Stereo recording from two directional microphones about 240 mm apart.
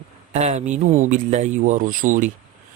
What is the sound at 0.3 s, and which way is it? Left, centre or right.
Speech, right.